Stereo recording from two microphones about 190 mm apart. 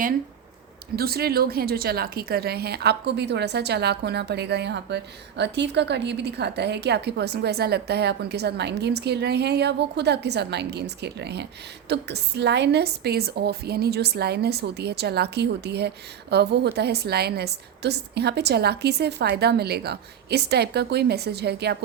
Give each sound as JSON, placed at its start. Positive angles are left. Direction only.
{"t": 0.9, "sound": "a woman's voice", "side_deg": -55}